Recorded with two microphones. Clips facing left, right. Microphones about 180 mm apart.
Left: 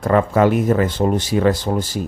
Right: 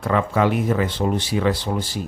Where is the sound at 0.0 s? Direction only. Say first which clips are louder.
Left 5 dB; 45° left (ahead or behind).